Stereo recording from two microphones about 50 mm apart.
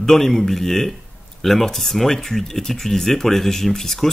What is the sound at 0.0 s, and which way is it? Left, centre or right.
Speech, centre.